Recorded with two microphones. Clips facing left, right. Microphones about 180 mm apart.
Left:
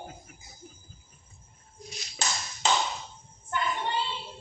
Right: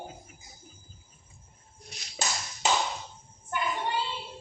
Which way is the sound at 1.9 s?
60° right (ahead or behind).